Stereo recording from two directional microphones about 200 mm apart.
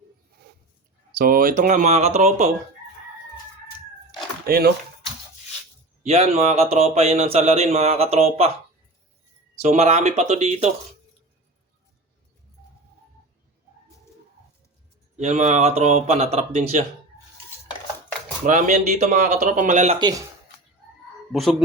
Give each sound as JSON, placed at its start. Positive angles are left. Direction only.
{"t": 1.2, "sound": "speech", "side_deg": -45}
{"t": 4.4, "sound": "speech", "side_deg": -50}
{"t": 6.0, "sound": "speech", "side_deg": -30}
{"t": 9.6, "sound": "speech", "side_deg": -35}
{"t": 15.2, "sound": "speech", "side_deg": -35}
{"t": 18.4, "sound": "speech", "side_deg": -40}
{"t": 20.0, "sound": "speech", "side_deg": -20}